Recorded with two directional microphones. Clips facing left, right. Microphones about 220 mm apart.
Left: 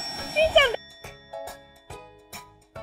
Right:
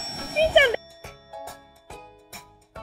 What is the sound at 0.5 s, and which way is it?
Music, 15° right (ahead or behind).